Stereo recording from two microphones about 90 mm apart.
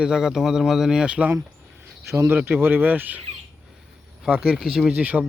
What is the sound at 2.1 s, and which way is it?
A man's voice, 30° right (ahead or behind).